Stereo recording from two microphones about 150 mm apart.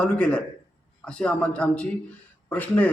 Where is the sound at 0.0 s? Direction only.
5° left (ahead or behind).